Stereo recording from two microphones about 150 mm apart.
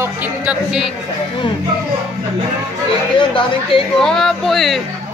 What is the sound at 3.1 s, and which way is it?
Speech, 35° left (ahead or behind).